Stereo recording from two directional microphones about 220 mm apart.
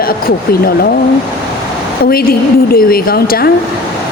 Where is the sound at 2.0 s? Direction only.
40° left (ahead or behind).